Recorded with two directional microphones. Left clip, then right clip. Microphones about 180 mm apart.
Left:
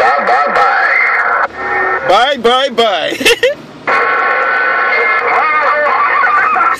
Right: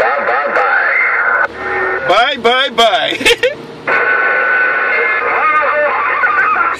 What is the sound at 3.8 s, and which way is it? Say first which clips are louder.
Radio: left 1 dB; 40° left (ahead or behind).